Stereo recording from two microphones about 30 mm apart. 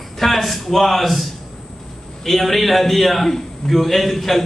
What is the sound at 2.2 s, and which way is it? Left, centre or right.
A man's voice, centre.